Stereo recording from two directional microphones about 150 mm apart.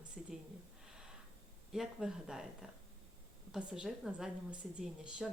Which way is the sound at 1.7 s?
5° right (ahead or behind).